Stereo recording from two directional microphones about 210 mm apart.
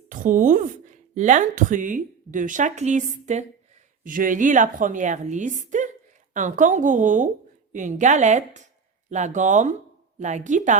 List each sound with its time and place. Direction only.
0.1 s speech: 40° right (ahead or behind)